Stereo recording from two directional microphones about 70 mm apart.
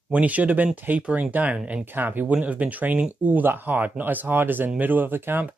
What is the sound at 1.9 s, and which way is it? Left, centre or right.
Speech, right.